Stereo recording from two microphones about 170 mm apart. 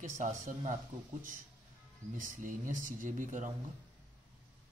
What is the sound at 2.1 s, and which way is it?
Speech, 50° right (ahead or behind).